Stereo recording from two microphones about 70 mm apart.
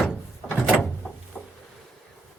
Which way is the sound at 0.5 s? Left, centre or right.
Centre.